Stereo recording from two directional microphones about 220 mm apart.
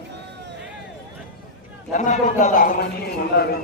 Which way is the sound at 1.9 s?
35° left (ahead or behind).